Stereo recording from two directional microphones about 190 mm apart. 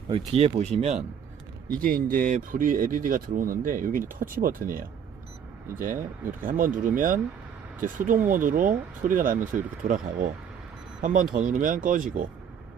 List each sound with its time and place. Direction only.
0.1 s speech: 35° right (ahead or behind)
1.8 s speech: 45° right (ahead or behind)
6.4 s speech: 45° right (ahead or behind)